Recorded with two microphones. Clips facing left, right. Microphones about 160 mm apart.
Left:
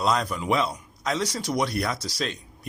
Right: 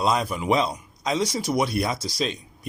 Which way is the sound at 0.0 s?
15° right (ahead or behind).